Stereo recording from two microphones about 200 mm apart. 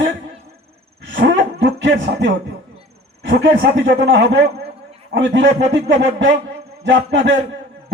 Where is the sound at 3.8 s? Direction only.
60° right (ahead or behind).